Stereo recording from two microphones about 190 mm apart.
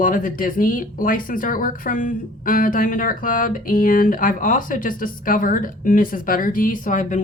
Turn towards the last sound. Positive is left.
turn(degrees=45)  # may be behind; listen again after turning